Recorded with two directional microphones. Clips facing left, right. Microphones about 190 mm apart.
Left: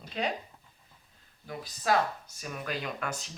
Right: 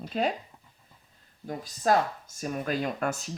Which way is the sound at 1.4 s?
45° right (ahead or behind).